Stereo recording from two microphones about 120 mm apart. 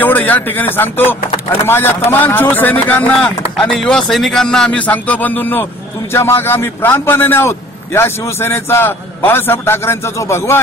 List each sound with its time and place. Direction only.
0.0 s a man's voice: 15° left (ahead or behind)